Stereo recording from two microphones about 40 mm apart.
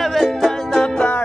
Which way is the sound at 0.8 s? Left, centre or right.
Left.